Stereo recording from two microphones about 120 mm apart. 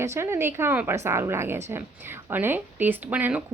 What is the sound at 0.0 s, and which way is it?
A woman's voice, 20° right (ahead or behind).